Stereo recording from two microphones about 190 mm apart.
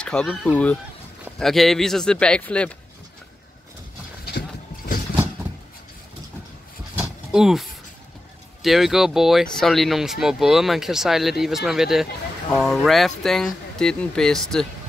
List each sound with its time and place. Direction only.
0.0 s speech: 5° left (ahead or behind)
4.3 s a sound: 55° left (ahead or behind)
7.3 s speech: centre (ahead or behind)
8.6 s speech: centre (ahead or behind)